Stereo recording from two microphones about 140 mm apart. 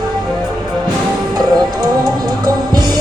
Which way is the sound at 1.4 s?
30° right (ahead or behind).